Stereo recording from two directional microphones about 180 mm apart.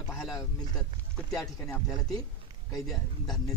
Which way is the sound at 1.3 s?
Centre (ahead or behind).